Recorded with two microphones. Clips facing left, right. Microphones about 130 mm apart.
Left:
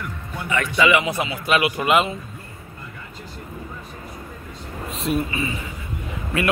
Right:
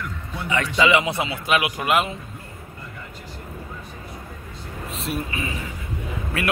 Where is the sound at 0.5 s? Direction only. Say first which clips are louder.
Even; 25° right (ahead or behind).